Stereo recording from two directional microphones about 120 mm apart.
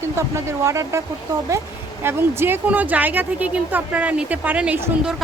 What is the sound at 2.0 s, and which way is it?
Speech, 20° right (ahead or behind).